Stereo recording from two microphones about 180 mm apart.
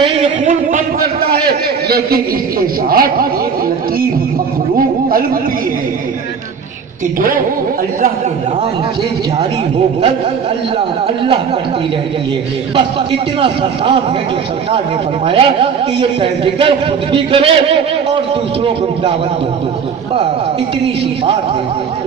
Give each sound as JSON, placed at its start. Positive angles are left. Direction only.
{"t": 0.0, "sound": "a man's voice", "side_deg": -35}
{"t": 7.2, "sound": "a woman's voice", "side_deg": -50}
{"t": 12.7, "sound": "a man's voice", "side_deg": -30}
{"t": 15.2, "sound": "a man's voice", "side_deg": -30}